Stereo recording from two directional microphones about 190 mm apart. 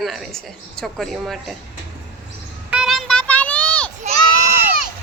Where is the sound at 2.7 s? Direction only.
Centre (ahead or behind).